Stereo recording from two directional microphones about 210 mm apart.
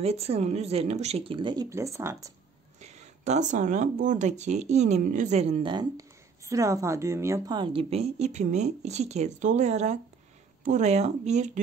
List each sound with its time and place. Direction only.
0.0 s speech: 30° right (ahead or behind); by 2.3 s 15° right (ahead or behind)
2.8 s speech: 30° right (ahead or behind)